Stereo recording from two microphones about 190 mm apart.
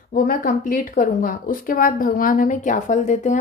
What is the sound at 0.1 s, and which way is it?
Speech, 50° left (ahead or behind).